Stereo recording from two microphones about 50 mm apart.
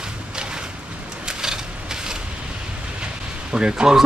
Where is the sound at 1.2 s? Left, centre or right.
Centre.